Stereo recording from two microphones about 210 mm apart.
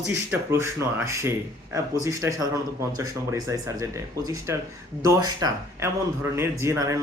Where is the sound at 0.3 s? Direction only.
10° right (ahead or behind).